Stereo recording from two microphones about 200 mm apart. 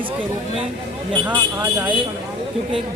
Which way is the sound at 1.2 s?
10° right (ahead or behind).